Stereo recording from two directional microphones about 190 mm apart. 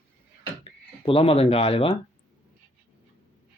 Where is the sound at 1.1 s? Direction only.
30° left (ahead or behind).